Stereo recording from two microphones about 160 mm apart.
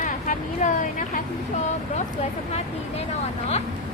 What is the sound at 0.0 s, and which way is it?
Vehicle, 55° left (ahead or behind).